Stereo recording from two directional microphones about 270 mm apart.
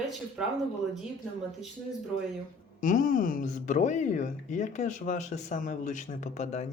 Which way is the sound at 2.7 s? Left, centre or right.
Left.